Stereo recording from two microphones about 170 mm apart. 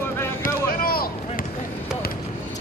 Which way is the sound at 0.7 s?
60° left (ahead or behind).